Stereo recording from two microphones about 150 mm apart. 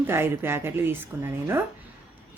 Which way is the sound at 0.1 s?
15° right (ahead or behind).